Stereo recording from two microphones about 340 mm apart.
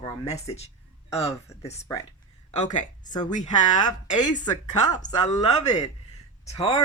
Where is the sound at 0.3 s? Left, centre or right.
Centre.